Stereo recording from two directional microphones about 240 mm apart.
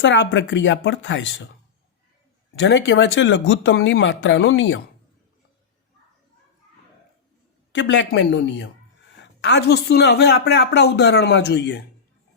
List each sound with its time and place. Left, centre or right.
0.0 s speech: left
2.6 s speech: left
7.7 s speech: left